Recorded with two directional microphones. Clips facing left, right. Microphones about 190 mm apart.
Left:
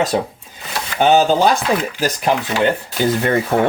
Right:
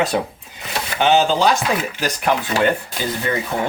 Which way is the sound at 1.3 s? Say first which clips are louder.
Left 2 dB; 55° left (ahead or behind).